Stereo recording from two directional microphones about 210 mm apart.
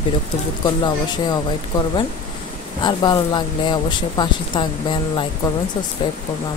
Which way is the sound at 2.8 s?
20° left (ahead or behind).